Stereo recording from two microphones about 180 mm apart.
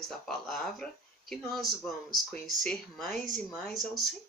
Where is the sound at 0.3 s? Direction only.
Centre (ahead or behind).